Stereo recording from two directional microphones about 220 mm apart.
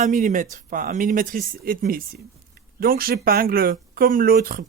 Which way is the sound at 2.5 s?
45° right (ahead or behind).